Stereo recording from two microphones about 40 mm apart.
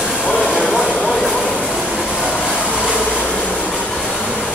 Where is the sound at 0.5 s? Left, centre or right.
Centre.